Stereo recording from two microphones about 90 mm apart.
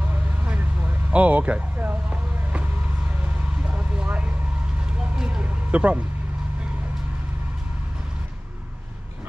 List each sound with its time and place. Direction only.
0.1 s vehicle: 20° right (ahead or behind)